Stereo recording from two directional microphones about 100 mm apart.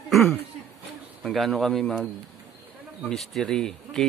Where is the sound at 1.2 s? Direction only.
Centre (ahead or behind).